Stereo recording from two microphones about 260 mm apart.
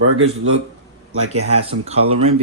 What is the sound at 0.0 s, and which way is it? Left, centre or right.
Speech, right.